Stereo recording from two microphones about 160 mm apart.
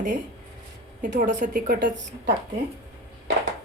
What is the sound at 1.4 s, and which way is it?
Speech, 80° right.